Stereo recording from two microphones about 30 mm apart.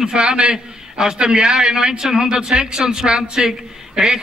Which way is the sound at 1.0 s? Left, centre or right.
Right.